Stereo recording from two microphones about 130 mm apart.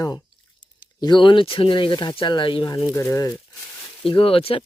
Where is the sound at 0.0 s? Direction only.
30° left (ahead or behind).